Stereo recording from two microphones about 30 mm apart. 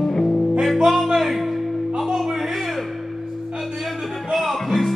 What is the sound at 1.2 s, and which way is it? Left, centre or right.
Music, centre.